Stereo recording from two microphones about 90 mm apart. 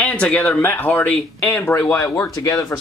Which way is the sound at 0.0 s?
15° left (ahead or behind).